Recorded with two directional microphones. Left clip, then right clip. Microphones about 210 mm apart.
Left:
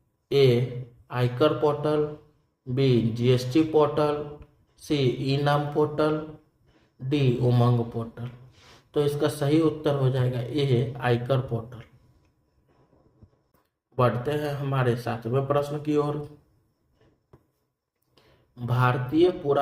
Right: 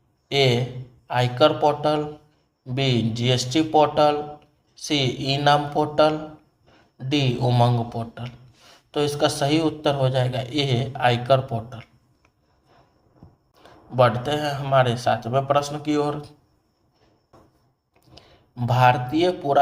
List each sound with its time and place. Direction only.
0.3 s a man's voice: 25° right (ahead or behind)
14.3 s a man's voice: 25° right (ahead or behind)
18.1 s speech: 25° right (ahead or behind)